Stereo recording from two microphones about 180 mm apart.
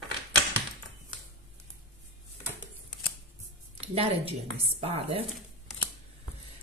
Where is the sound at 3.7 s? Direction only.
35° right (ahead or behind).